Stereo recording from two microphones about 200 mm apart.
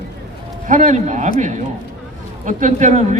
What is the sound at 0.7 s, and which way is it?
A man's voice, 35° right (ahead or behind).